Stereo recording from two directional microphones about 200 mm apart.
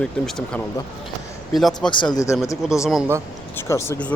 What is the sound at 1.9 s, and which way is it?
Speech, 20° left (ahead or behind).